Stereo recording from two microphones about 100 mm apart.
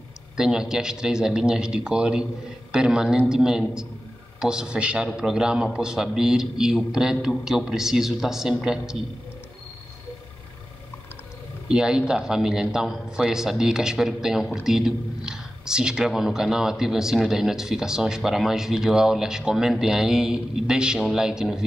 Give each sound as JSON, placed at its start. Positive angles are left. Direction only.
{"t": 0.4, "sound": "a man's voice", "side_deg": -5}
{"t": 11.7, "sound": "a man's voice", "side_deg": -5}